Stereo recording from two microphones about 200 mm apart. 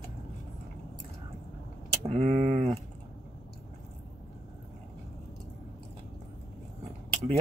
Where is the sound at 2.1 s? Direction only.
30° right (ahead or behind).